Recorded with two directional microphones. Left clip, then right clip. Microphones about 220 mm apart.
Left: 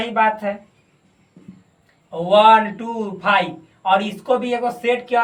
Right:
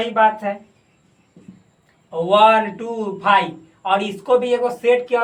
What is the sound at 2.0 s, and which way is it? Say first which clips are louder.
Speech: left 1 dB; 20° right (ahead or behind).